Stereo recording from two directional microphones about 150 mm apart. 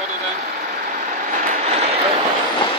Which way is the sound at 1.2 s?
60° right (ahead or behind).